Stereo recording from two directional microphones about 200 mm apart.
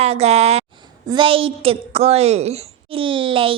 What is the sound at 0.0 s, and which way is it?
A child's voice, 30° right (ahead or behind).